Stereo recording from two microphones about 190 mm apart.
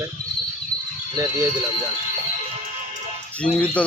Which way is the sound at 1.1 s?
15° right (ahead or behind).